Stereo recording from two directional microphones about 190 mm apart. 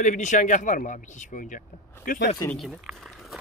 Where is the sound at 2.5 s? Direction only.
Centre (ahead or behind).